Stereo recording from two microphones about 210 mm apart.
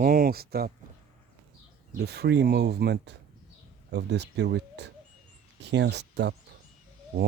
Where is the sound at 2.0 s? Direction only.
50° right (ahead or behind).